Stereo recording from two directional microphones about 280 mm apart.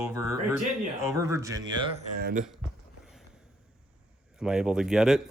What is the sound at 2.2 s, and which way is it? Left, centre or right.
Speech, right.